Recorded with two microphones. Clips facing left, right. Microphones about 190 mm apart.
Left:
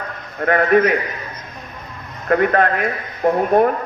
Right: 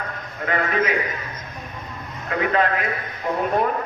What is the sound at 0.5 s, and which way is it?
Speech, 60° left (ahead or behind).